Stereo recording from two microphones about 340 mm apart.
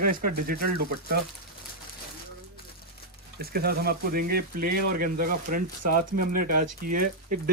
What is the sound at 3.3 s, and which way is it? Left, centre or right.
Speech, right.